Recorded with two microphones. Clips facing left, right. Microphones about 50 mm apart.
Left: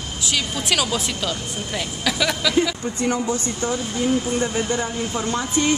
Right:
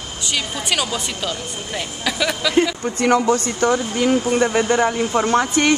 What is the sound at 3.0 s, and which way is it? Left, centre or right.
Speech, right.